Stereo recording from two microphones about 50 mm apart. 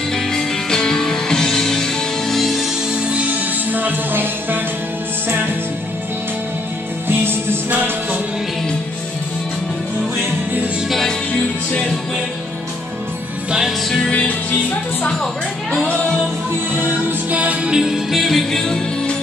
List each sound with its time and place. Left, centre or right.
0.1 s music: centre
3.1 s music: right
7.1 s music: right
10.9 s music: centre
13.5 s music: centre
13.8 s music: centre
14.1 s music: left
17.3 s music: right
17.7 s music: centre
18.2 s music: centre